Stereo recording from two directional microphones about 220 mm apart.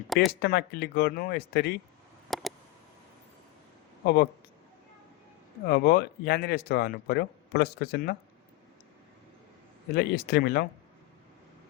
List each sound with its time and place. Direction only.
0.1 s speech: centre (ahead or behind)
0.4 s speech: 45° left (ahead or behind)
2.3 s a sound: centre (ahead or behind)
4.0 s speech: 45° left (ahead or behind)
5.6 s speech: 45° left (ahead or behind)
9.9 s speech: 45° left (ahead or behind)